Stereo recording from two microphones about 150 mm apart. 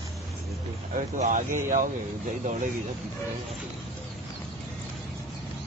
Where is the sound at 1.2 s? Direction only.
60° right (ahead or behind).